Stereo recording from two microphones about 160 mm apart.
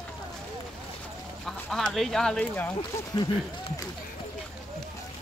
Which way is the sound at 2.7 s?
30° left (ahead or behind).